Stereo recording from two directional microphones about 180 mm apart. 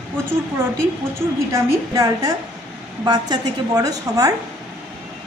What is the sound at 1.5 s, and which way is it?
A woman's voice, 15° right (ahead or behind).